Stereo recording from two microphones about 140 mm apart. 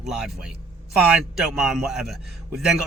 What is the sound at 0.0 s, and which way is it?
Speech, 5° right (ahead or behind).